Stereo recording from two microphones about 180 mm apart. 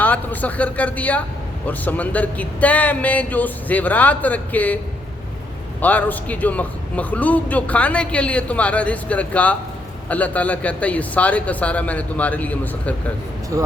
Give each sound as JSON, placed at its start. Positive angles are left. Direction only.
{"t": 0.0, "sound": "a man's voice", "side_deg": 10}
{"t": 5.8, "sound": "a man's voice", "side_deg": 10}
{"t": 13.5, "sound": "speech", "side_deg": -15}